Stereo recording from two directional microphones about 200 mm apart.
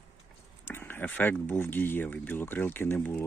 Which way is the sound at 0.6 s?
10° left (ahead or behind).